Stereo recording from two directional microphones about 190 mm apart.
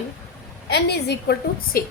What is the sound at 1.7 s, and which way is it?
Speech, 50° left (ahead or behind).